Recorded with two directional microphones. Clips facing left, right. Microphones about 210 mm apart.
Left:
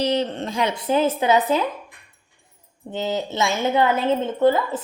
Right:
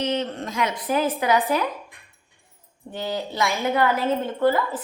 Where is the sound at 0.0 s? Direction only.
35° left (ahead or behind).